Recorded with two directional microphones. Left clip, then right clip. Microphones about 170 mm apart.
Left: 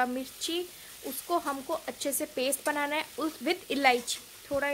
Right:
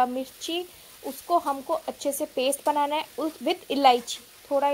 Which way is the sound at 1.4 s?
10° left (ahead or behind).